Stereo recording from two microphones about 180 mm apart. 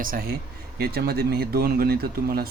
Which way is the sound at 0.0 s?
50° right (ahead or behind).